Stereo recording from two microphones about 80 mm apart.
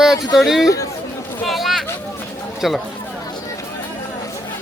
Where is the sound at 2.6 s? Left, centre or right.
Centre.